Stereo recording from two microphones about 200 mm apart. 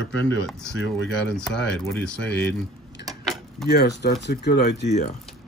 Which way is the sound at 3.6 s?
55° left (ahead or behind).